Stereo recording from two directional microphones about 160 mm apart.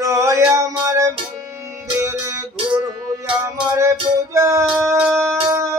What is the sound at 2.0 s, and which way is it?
Music, 15° right (ahead or behind).